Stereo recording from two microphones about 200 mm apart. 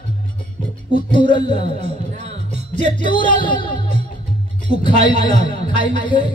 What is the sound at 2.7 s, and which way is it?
Speech, 25° left (ahead or behind).